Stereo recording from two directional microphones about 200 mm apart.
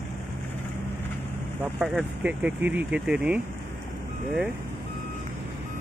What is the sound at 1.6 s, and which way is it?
Speech, centre (ahead or behind).